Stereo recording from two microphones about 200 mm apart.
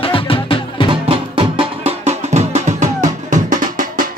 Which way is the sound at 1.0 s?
25° right (ahead or behind).